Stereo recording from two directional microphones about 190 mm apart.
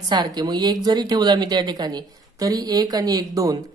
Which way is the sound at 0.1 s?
20° right (ahead or behind).